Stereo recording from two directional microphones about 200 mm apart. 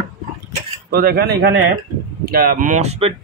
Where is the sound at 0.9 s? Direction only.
50° right (ahead or behind).